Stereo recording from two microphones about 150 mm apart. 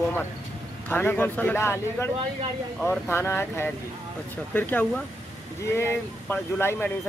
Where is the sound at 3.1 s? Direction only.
15° left (ahead or behind).